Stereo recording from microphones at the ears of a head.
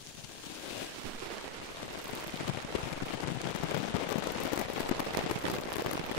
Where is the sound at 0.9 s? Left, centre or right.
Right.